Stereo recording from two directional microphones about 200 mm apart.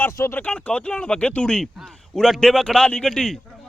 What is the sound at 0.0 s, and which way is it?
Speech, 10° left (ahead or behind).